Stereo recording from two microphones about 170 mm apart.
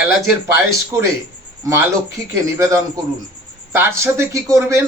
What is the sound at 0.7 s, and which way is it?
Speech, 15° right (ahead or behind).